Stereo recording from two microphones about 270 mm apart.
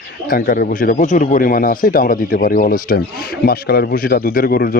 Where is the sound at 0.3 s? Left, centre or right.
Left.